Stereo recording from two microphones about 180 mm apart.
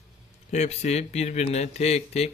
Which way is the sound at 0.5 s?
40° left (ahead or behind).